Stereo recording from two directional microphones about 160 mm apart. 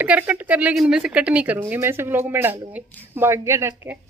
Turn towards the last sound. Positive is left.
turn(degrees=-15)  # may be behind; listen again after turning